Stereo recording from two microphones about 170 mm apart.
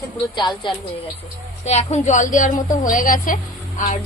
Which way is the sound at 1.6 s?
40° left (ahead or behind).